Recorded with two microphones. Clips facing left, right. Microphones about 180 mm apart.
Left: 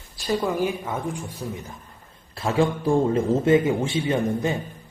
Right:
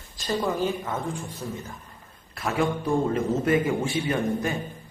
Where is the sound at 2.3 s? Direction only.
30° left (ahead or behind).